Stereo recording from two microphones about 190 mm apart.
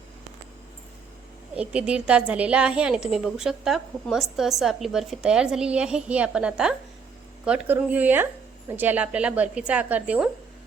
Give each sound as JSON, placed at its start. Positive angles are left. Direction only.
{"t": 1.5, "sound": "a woman's voice", "side_deg": -5}